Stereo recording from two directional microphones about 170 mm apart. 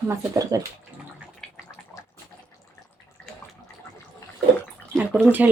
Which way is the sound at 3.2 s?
5° left (ahead or behind).